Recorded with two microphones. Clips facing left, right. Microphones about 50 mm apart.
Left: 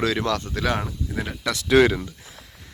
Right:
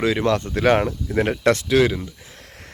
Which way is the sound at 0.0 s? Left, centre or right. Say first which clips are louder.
Right 4 dB; right.